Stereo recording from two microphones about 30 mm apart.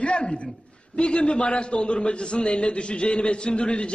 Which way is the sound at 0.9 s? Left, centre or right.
Left.